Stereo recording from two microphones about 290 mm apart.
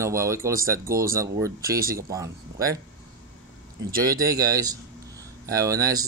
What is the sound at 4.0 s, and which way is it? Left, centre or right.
Speech, centre.